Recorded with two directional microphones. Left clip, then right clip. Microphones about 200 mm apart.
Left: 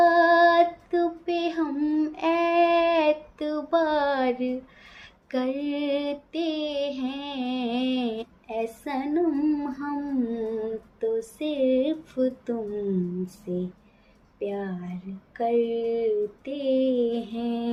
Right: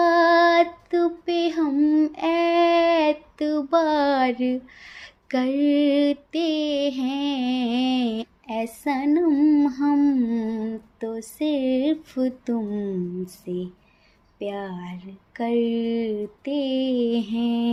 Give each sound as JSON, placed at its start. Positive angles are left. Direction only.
{"t": 0.0, "sound": "child singing", "side_deg": -40}
{"t": 4.9, "sound": "female singing", "side_deg": -40}